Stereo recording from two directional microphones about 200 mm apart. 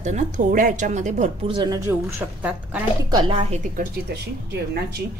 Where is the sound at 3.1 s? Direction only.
25° right (ahead or behind).